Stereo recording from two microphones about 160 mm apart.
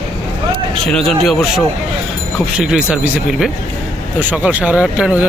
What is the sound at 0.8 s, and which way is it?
Speech, 5° left (ahead or behind).